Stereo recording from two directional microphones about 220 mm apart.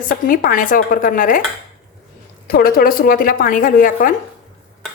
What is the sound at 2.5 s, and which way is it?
A woman's voice, 40° left (ahead or behind).